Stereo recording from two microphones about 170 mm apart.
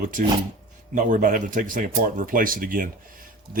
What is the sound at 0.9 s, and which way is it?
Speech, 50° right (ahead or behind).